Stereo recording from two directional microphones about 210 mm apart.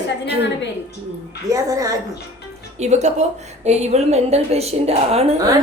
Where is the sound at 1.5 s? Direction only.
15° right (ahead or behind).